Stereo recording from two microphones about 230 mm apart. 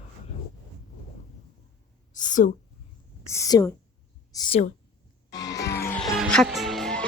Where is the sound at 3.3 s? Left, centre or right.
Centre.